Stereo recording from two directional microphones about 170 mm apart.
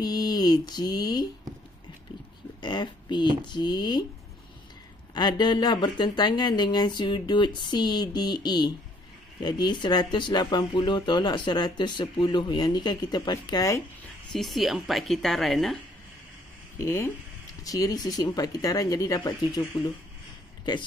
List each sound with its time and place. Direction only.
0.0 s a sound: 25° left (ahead or behind)
2.6 s speech: 25° left (ahead or behind)
5.1 s speech: 25° left (ahead or behind)
14.3 s a woman's voice: centre (ahead or behind)
16.7 s speech: 15° left (ahead or behind)